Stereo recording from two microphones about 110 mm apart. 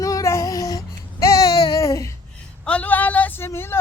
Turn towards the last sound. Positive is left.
turn(degrees=20)  # may be behind; listen again after turning